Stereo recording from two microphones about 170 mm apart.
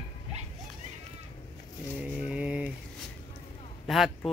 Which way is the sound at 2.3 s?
5° right (ahead or behind).